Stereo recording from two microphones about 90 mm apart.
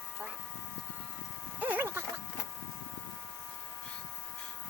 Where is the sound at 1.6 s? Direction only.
20° right (ahead or behind).